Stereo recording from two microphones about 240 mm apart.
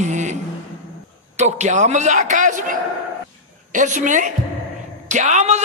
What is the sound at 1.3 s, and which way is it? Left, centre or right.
A man's voice, right.